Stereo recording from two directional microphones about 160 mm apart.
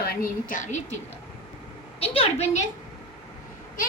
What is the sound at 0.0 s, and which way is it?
Speech, 65° left (ahead or behind).